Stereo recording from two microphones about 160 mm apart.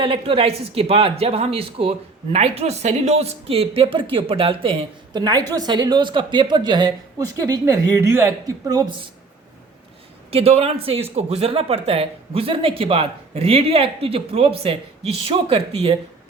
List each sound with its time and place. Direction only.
0.0 s speech: 35° right (ahead or behind)
10.3 s speech: 40° right (ahead or behind)